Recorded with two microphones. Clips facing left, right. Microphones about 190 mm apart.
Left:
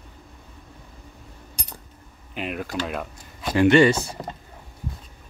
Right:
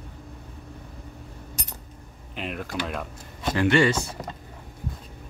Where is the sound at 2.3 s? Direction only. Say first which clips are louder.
Left 3 dB; 5° left (ahead or behind).